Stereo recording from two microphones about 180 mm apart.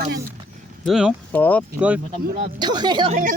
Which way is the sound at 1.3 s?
10° left (ahead or behind).